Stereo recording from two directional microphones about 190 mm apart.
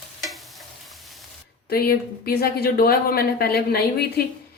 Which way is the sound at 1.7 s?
55° left (ahead or behind).